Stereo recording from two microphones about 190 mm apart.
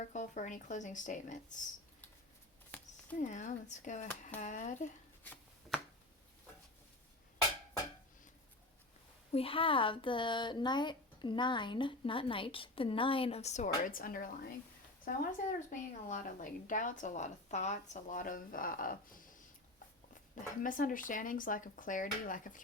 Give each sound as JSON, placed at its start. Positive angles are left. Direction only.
{"t": 0.0, "sound": "speech", "side_deg": 40}
{"t": 2.7, "sound": "a sound", "side_deg": 5}
{"t": 3.2, "sound": "speech", "side_deg": 40}
{"t": 9.3, "sound": "a woman's voice", "side_deg": 30}
{"t": 20.6, "sound": "a woman's voice", "side_deg": 45}